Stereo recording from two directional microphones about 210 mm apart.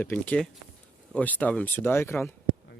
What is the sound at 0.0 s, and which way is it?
Speech, 5° left (ahead or behind).